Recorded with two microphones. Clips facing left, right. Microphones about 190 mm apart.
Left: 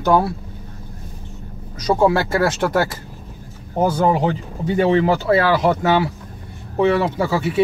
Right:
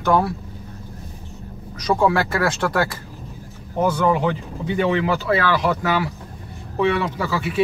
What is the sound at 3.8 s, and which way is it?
Speech, 35° left (ahead or behind).